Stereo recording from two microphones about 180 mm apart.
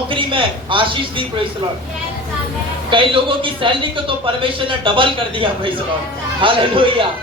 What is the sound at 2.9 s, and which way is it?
A man's voice, 30° right (ahead or behind).